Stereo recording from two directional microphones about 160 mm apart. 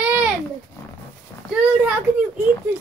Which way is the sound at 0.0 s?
10° right (ahead or behind).